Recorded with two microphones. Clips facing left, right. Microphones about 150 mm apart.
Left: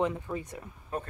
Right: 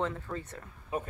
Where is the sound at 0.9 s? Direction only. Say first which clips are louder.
Right 1 dB; 10° right (ahead or behind).